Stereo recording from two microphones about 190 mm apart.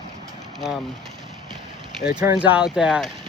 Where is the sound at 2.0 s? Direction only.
50° left (ahead or behind).